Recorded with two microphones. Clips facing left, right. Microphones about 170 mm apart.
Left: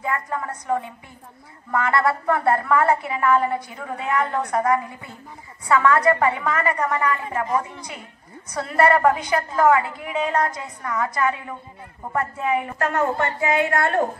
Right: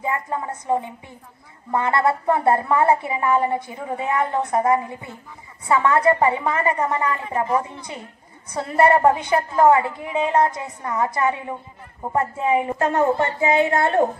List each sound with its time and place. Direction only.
0.0 s a woman's voice: 20° right (ahead or behind)